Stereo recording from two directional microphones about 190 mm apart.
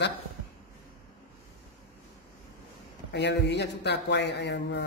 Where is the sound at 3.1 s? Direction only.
65° left (ahead or behind).